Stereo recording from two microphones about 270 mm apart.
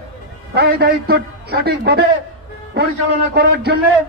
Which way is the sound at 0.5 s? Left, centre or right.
Right.